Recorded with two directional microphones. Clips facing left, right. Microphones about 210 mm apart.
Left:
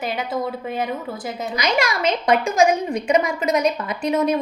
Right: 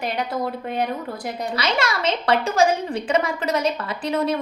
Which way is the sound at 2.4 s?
15° left (ahead or behind).